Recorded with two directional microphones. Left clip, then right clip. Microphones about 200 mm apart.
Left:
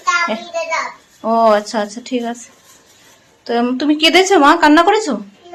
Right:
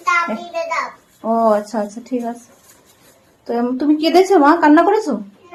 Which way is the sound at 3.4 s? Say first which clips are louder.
Left 2 dB; centre (ahead or behind).